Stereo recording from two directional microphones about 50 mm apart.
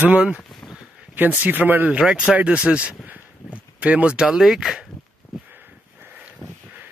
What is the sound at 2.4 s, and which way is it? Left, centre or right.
Speech, right.